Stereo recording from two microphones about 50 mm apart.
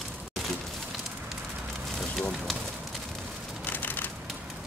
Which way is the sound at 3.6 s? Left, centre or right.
Left.